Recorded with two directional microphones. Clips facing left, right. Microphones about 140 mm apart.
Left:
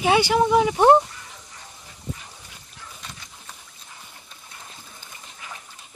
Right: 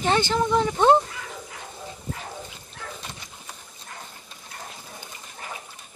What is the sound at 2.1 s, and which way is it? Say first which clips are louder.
Dog: right 6 dB; 70° right (ahead or behind).